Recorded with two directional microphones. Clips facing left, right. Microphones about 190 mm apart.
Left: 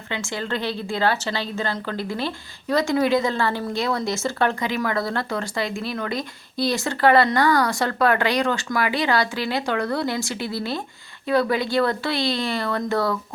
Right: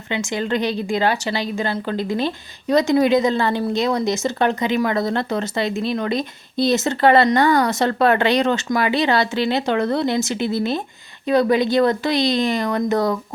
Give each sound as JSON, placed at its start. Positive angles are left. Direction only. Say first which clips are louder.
{"t": 0.1, "sound": "a woman's voice", "louder": "right 5 dB", "side_deg": -20}